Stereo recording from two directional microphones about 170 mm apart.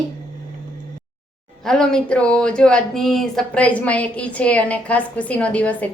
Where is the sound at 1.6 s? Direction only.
5° left (ahead or behind).